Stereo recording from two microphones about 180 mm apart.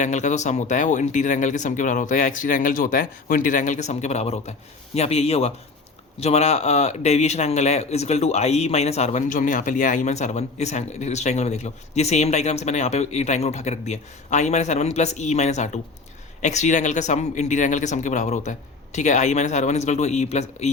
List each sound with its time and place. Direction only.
0.0 s a man's voice: 40° left (ahead or behind)